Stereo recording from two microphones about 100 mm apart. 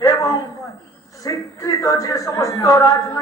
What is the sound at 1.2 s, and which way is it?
A man's voice, 35° left (ahead or behind).